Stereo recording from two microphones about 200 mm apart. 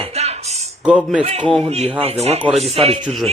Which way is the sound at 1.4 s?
5° left (ahead or behind).